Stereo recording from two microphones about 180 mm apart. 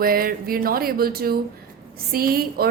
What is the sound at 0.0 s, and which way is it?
A woman's voice, 55° right (ahead or behind).